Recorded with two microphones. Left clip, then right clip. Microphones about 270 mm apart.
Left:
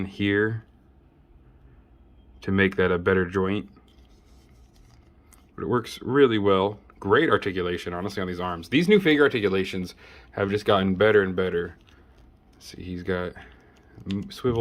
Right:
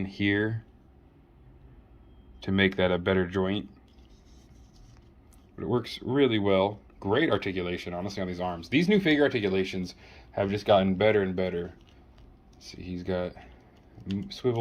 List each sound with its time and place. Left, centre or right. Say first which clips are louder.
0.0 s speech: left 2 dB; centre
0.3 s speech: left 5 dB; left
2.6 s speech: left 3 dB; left
5.5 s speech: left 4 dB; left
6.1 s speech: left 4 dB; centre